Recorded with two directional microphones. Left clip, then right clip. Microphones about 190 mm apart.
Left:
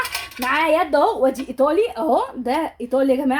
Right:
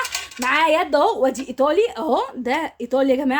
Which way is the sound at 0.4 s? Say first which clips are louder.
Right 1 dB; 30° right (ahead or behind).